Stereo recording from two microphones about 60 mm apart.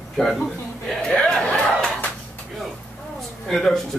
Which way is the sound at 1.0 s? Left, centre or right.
Centre.